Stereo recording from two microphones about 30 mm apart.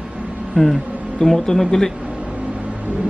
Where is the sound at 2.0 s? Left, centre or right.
Right.